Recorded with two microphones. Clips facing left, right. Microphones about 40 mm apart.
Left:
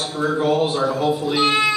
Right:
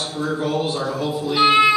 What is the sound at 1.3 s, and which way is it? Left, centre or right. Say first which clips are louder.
Music: right 6 dB; centre.